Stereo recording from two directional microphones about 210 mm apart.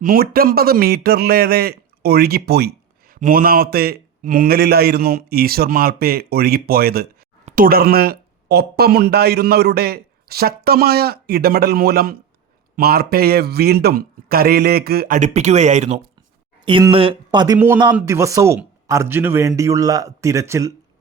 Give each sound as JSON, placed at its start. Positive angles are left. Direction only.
{"t": 0.0, "sound": "a man's voice", "side_deg": -45}